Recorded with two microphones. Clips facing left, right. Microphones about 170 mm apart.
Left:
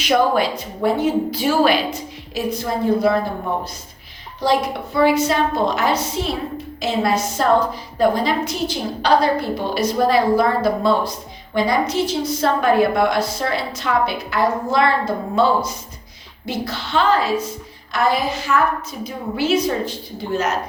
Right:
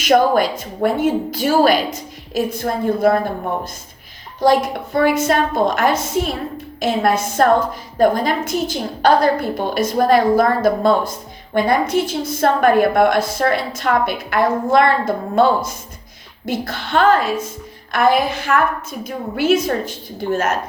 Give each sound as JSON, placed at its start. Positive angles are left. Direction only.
{"t": 0.0, "sound": "a woman's voice", "side_deg": -45}
{"t": 3.1, "sound": "a woman's voice", "side_deg": -45}
{"t": 4.4, "sound": "a woman's voice", "side_deg": -45}